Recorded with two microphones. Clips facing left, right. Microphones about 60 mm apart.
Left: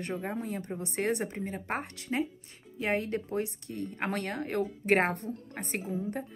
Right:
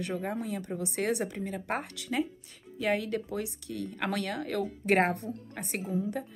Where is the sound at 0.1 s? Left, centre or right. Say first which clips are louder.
Even; centre.